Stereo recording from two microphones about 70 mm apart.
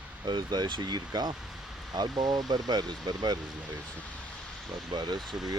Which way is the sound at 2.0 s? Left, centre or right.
Right.